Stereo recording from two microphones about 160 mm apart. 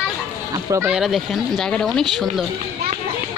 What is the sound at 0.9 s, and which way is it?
Speech, centre (ahead or behind).